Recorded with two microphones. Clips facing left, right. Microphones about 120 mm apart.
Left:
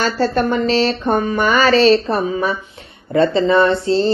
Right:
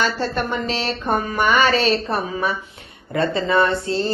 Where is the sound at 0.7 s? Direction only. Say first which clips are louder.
Left 6 dB; 30° left (ahead or behind).